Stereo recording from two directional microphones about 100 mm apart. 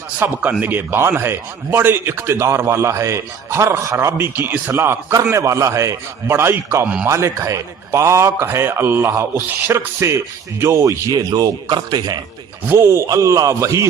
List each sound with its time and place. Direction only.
0.2 s a man's voice: 25° right (ahead or behind); by 12.2 s 45° right (ahead or behind)
12.6 s a man's voice: 25° right (ahead or behind)